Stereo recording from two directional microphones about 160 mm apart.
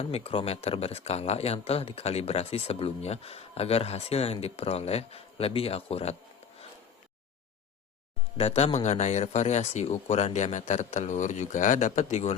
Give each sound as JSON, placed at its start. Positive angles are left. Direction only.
{"t": 0.0, "sound": "speech", "side_deg": 35}
{"t": 8.4, "sound": "speech", "side_deg": 40}